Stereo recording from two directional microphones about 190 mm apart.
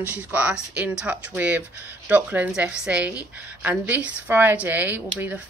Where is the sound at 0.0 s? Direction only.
5° right (ahead or behind).